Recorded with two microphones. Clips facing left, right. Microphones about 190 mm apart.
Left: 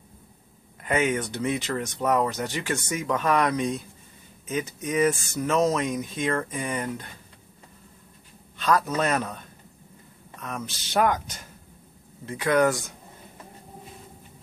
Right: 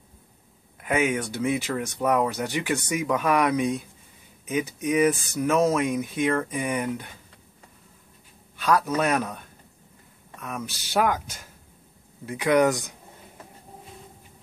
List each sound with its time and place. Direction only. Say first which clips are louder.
0.7 s speech: even; 5° right (ahead or behind)
8.5 s speech: right 1 dB; 10° right (ahead or behind)
10.4 s speech: right 1 dB; 10° right (ahead or behind)